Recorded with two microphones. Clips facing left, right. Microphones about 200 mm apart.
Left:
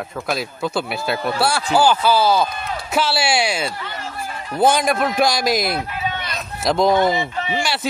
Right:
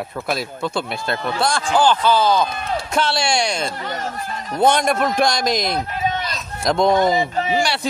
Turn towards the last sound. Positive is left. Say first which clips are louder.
# right 1 dB
turn(degrees=0)  # may be behind; listen again after turning